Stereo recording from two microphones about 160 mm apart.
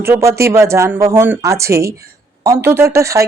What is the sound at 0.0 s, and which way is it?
Speech, 15° right (ahead or behind).